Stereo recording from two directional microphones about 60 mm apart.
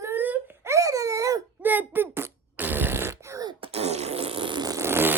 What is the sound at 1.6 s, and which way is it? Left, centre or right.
Fart, right.